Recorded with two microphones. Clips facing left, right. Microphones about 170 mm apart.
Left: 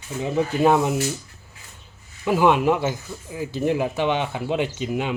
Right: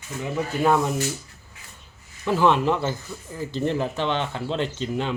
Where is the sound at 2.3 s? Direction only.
15° left (ahead or behind).